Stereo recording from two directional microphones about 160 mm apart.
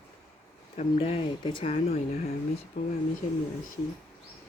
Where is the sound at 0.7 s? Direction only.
40° left (ahead or behind).